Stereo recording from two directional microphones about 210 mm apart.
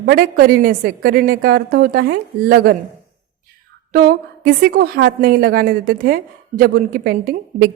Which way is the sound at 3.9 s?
45° right (ahead or behind).